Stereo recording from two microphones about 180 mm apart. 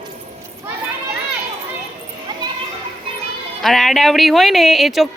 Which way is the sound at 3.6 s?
Centre (ahead or behind).